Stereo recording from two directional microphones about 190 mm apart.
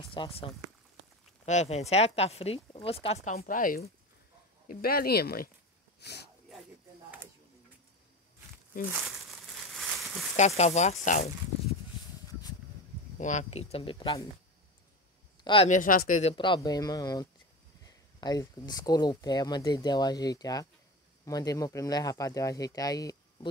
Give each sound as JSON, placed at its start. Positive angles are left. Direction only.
{"t": 0.1, "sound": "speech", "side_deg": 25}
{"t": 1.4, "sound": "speech", "side_deg": 35}
{"t": 9.8, "sound": "a sound", "side_deg": 0}
{"t": 10.3, "sound": "speech", "side_deg": 35}
{"t": 12.3, "sound": "a sound", "side_deg": 20}
{"t": 13.2, "sound": "speech", "side_deg": 40}
{"t": 15.4, "sound": "speech", "side_deg": 30}
{"t": 15.7, "sound": "speech", "side_deg": 45}